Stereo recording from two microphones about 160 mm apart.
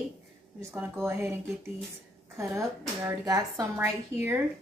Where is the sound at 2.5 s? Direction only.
20° right (ahead or behind).